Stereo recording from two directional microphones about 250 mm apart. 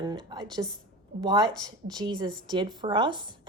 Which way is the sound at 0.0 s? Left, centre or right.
Centre.